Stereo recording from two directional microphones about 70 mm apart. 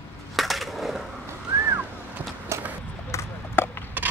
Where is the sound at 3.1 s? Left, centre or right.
Left.